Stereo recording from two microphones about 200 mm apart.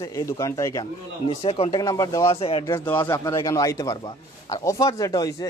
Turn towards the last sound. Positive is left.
turn(degrees=20)  # may be behind; listen again after turning